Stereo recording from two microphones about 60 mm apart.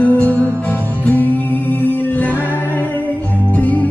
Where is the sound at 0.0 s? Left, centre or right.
Left.